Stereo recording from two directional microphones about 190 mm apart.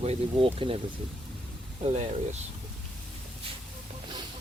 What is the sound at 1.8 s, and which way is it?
Speech, 35° right (ahead or behind).